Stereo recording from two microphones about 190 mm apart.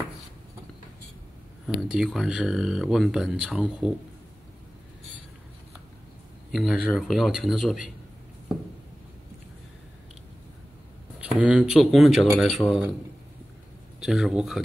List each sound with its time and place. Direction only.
1.7 s speech: centre (ahead or behind)
6.5 s speech: 5° right (ahead or behind)
11.1 s speech: 5° right (ahead or behind)
13.9 s speech: 5° right (ahead or behind)